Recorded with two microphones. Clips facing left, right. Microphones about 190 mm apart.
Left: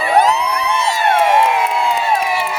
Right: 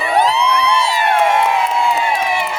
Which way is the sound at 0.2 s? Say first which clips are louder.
Right 1 dB; 45° left (ahead or behind).